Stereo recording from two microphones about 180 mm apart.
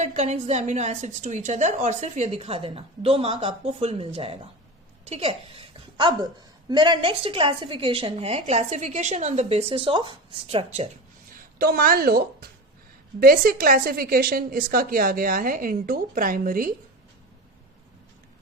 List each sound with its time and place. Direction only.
0.0 s a woman's voice: 40° right (ahead or behind)
11.3 s a woman's voice: 55° right (ahead or behind)